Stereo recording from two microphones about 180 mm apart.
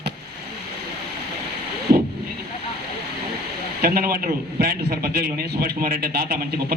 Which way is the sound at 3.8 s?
55° right (ahead or behind).